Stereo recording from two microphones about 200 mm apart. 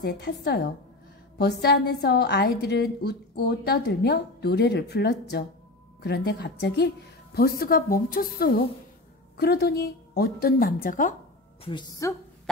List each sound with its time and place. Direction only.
0.0 s a woman's voice: 55° left (ahead or behind)
11.6 s a woman's voice: 20° left (ahead or behind)